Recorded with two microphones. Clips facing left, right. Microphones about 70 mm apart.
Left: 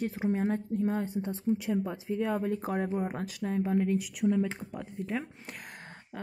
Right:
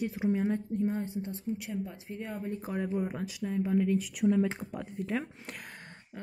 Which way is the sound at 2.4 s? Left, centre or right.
Left.